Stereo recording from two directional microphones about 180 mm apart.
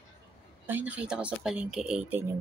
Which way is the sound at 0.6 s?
10° right (ahead or behind).